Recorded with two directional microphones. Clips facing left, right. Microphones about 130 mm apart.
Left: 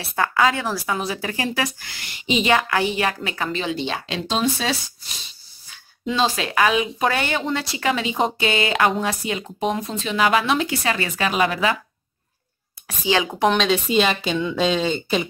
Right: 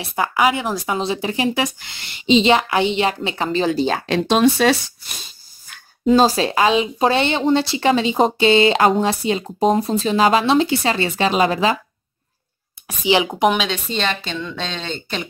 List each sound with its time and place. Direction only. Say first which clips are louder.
0.0 s speech: right 2 dB; 15° right (ahead or behind); by 4.2 s 45° right (ahead or behind)
4.3 s speech: right 8 dB; 65° right (ahead or behind); by 11.8 s 30° right (ahead or behind)
12.8 s speech: right 4 dB; 20° right (ahead or behind)
13.5 s speech: left 1 dB; 5° right (ahead or behind)
13.8 s a woman's voice: left 4 dB; 5° left (ahead or behind)